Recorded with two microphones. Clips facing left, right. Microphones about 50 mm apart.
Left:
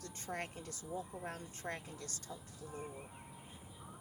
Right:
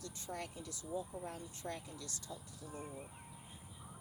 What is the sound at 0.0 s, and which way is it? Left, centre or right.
Speech, left.